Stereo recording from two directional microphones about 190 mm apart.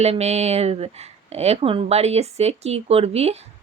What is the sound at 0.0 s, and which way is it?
Speech, 35° right (ahead or behind).